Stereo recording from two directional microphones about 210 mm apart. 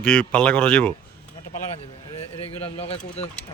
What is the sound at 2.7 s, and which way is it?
Speech, 30° left (ahead or behind).